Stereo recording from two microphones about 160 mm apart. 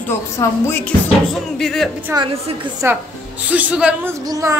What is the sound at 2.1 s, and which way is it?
Speech, 30° right (ahead or behind).